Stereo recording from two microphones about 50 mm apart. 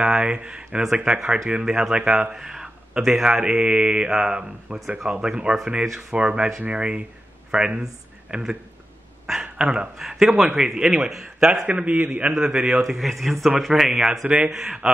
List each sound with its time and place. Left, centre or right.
0.0 s a man's voice: centre
2.3 s a sound: centre
3.3 s a man's voice: centre
9.2 s a sound: centre
9.9 s speech: centre
11.6 s a man's voice: right
12.8 s speech: centre
13.7 s speech: centre